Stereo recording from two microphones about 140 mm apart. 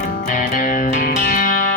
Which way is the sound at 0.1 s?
70° left (ahead or behind).